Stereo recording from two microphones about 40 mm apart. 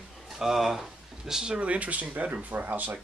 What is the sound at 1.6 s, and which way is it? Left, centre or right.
Speech, right.